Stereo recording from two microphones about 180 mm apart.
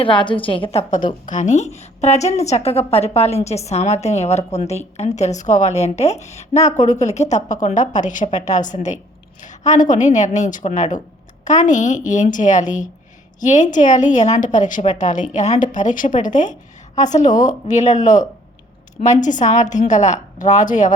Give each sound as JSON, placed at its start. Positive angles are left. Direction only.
{"t": 0.0, "sound": "a woman's voice", "side_deg": 25}